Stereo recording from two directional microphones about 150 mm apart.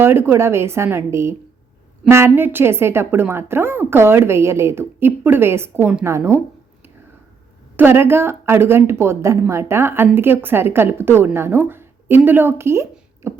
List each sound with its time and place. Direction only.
0.0 s a woman's voice: 15° right (ahead or behind)
7.8 s a woman's voice: 15° right (ahead or behind)